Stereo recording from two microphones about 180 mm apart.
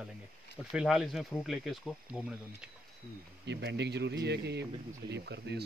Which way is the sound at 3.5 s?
70° right (ahead or behind).